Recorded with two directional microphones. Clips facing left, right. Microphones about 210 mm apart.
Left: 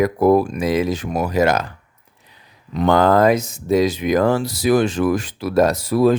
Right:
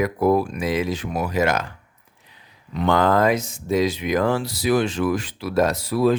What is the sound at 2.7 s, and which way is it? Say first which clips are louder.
Speech: left 4 dB; 40° left (ahead or behind).